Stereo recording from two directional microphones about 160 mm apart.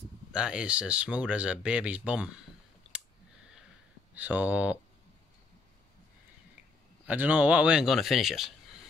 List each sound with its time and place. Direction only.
0.3 s speech: 5° right (ahead or behind)
2.9 s clicking: 5° right (ahead or behind)
4.1 s speech: 10° right (ahead or behind)
7.1 s speech: 10° right (ahead or behind)